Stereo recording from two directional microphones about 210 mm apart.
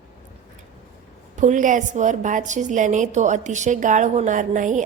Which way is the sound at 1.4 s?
35° right (ahead or behind).